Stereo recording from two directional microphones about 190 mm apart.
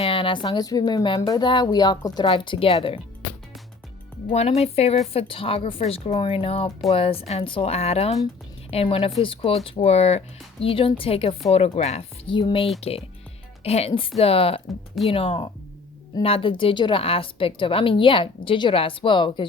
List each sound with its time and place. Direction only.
0.0 s a woman's voice: 30° left (ahead or behind)
4.3 s a woman's voice: 35° left (ahead or behind)